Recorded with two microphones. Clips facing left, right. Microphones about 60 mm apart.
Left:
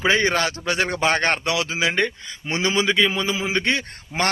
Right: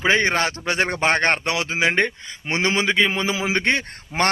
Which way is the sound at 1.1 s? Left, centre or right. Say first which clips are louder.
Right 1 dB; right.